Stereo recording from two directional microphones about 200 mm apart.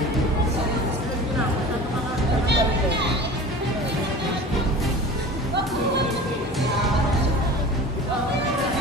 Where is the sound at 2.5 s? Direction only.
60° right (ahead or behind).